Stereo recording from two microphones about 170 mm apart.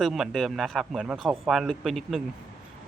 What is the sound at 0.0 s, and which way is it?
Speech, centre (ahead or behind).